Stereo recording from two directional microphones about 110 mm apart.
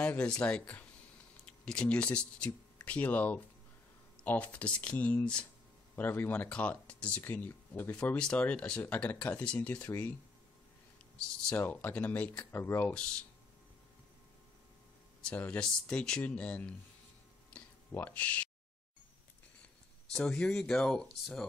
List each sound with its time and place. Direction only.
0.0 s speech: 10° left (ahead or behind)
11.1 s a sound: 5° left (ahead or behind)
11.6 s speech: 15° left (ahead or behind)
15.2 s speech: 15° left (ahead or behind)
17.5 s a sound: 15° left (ahead or behind)
20.1 s speech: 5° left (ahead or behind)